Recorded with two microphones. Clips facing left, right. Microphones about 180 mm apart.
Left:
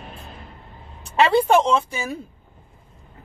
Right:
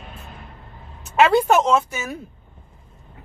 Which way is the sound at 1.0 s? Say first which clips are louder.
Right 1 dB; 30° left (ahead or behind).